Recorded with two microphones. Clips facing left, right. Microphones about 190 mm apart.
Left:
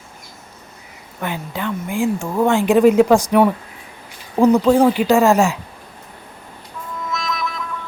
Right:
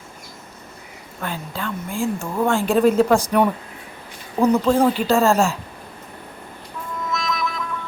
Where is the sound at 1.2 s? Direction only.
15° left (ahead or behind).